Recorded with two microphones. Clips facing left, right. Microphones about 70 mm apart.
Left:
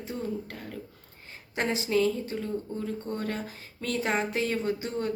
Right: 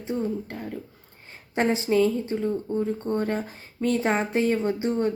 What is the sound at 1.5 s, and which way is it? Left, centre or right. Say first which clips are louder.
Speech: right 5 dB; right.